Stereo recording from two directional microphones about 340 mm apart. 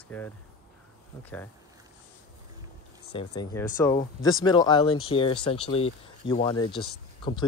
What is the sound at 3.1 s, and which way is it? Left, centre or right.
Speech, centre.